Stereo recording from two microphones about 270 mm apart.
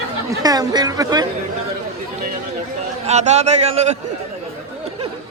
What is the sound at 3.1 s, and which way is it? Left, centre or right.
Speech, right.